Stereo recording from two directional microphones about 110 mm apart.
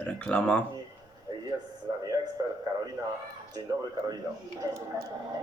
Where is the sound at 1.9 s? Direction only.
35° right (ahead or behind).